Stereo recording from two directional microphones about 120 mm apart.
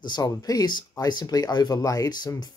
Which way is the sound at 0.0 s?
35° left (ahead or behind).